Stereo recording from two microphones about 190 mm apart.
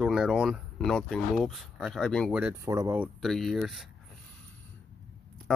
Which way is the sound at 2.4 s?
10° right (ahead or behind).